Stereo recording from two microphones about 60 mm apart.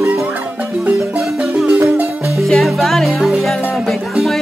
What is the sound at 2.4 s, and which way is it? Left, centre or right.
Music, centre.